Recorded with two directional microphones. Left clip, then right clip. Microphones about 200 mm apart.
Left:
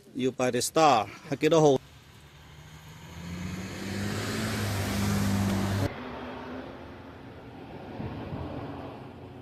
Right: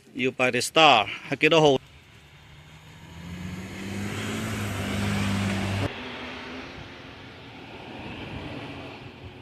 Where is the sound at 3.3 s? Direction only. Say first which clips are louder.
Even; 50° right (ahead or behind).